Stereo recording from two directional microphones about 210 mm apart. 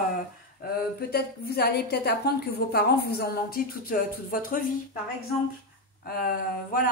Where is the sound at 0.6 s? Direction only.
45° left (ahead or behind).